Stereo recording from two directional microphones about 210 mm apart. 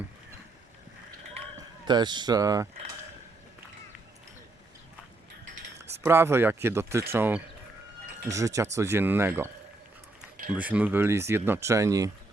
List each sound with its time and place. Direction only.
1.9 s speech: 20° right (ahead or behind)
6.0 s speech: 10° right (ahead or behind)
10.5 s speech: 5° right (ahead or behind)